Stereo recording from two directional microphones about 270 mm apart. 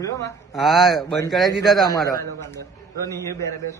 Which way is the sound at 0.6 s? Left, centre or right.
Centre.